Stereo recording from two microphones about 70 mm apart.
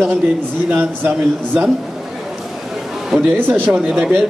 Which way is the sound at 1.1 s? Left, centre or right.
Centre.